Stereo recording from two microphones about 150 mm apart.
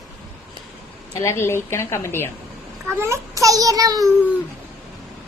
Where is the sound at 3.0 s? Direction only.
20° right (ahead or behind).